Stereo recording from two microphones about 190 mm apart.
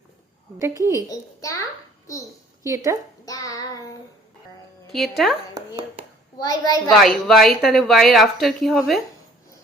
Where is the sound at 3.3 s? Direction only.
20° left (ahead or behind).